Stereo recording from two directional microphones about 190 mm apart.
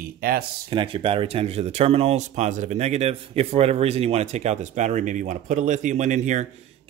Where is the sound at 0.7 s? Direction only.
25° right (ahead or behind).